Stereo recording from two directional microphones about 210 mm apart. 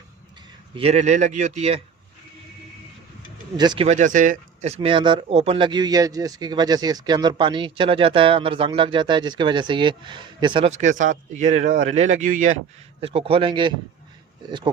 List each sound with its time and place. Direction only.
0.8 s speech: 30° right (ahead or behind)
3.6 s speech: 20° right (ahead or behind)
3.8 s speech: 35° right (ahead or behind)
13.0 s speech: 25° right (ahead or behind)